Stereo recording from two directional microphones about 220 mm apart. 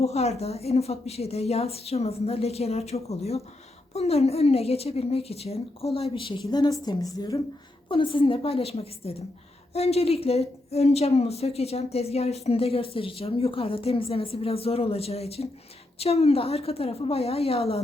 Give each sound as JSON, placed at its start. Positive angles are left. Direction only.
{"t": 0.0, "sound": "a woman's voice", "side_deg": 30}